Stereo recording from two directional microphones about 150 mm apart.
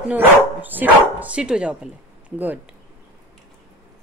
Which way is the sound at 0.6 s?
10° right (ahead or behind).